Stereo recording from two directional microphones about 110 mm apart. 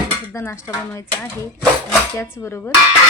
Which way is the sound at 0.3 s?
25° left (ahead or behind).